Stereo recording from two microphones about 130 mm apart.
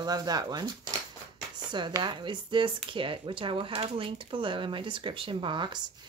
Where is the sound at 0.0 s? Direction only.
30° right (ahead or behind).